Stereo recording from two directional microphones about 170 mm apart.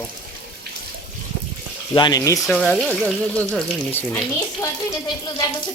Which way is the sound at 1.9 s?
25° left (ahead or behind).